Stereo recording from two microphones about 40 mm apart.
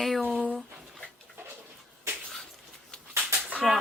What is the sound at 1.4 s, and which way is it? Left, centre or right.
Bird, right.